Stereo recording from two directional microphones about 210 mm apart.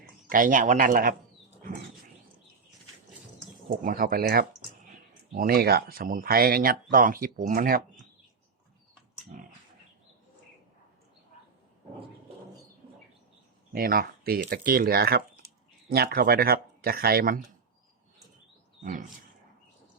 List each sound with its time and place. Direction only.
0.3 s speech: 40° right (ahead or behind)
3.7 s speech: 45° right (ahead or behind)
9.3 s pig: 35° right (ahead or behind)
13.7 s speech: 45° right (ahead or behind)
18.8 s wild animals: 40° right (ahead or behind)